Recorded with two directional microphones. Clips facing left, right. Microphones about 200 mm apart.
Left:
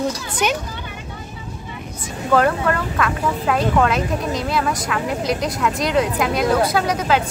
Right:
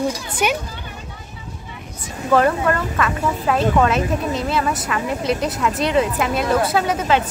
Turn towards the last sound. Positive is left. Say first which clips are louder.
# right 1 dB
turn(degrees=0)  # may be behind; listen again after turning